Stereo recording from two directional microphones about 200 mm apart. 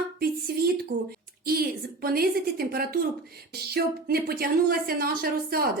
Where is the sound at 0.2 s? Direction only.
50° right (ahead or behind).